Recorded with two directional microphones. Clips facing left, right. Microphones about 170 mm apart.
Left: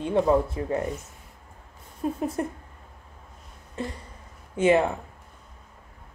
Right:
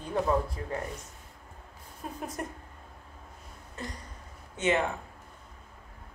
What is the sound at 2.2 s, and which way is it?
Speech, 30° left (ahead or behind).